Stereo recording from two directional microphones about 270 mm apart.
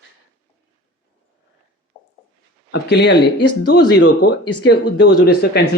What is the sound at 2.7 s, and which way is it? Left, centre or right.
Speech, left.